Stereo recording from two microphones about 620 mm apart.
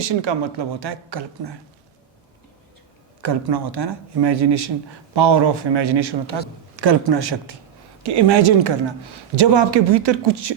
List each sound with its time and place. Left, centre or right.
0.0 s a woman's voice: right
3.2 s a woman's voice: right